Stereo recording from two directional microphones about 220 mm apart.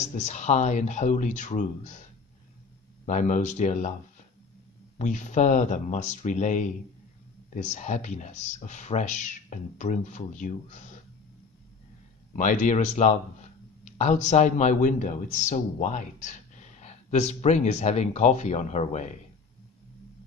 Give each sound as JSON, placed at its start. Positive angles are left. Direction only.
{"t": 0.0, "sound": "speech", "side_deg": 30}
{"t": 3.1, "sound": "speech", "side_deg": 35}
{"t": 4.9, "sound": "speech", "side_deg": 35}
{"t": 12.4, "sound": "speech", "side_deg": 35}